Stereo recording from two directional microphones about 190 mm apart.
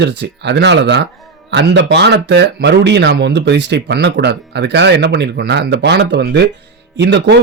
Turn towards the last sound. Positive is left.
turn(degrees=-65)  # may be behind; listen again after turning